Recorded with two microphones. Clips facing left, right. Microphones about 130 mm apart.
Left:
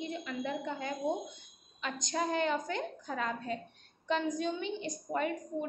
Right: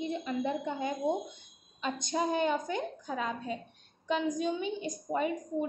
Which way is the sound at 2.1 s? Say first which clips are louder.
Right 2 dB; 15° right (ahead or behind).